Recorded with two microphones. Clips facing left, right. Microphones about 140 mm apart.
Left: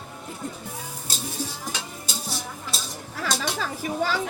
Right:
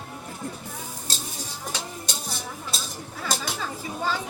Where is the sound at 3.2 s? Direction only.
90° left.